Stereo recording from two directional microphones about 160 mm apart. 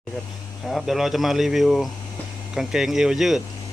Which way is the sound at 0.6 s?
Centre (ahead or behind).